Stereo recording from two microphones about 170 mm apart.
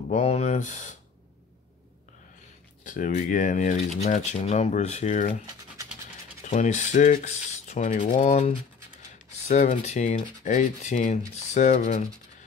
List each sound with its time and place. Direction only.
0.1 s rub: 40° left (ahead or behind)
2.8 s rub: 50° left (ahead or behind)
6.5 s rub: 45° left (ahead or behind)
8.0 s speech: 35° left (ahead or behind)
9.3 s rub: 45° left (ahead or behind)